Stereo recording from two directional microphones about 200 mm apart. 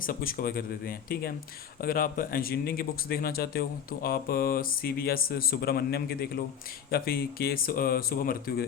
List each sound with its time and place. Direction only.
0.0 s speech: 45° left (ahead or behind)